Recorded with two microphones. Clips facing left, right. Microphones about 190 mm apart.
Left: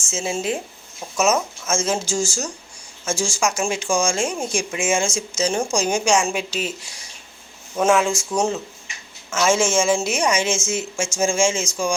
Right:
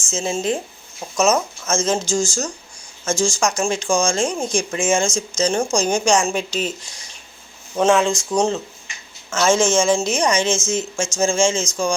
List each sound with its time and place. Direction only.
0.1 s speech: 10° left (ahead or behind)
9.3 s speech: 5° left (ahead or behind)